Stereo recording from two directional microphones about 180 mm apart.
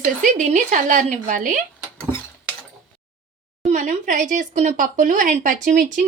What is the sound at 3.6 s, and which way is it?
Speech, 40° right (ahead or behind).